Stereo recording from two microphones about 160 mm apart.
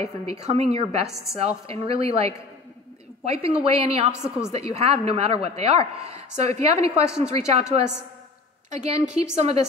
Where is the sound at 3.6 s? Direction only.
40° right (ahead or behind).